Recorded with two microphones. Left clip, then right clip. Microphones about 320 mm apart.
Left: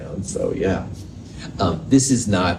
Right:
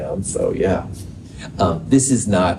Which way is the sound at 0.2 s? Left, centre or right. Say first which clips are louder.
Right 1 dB; right.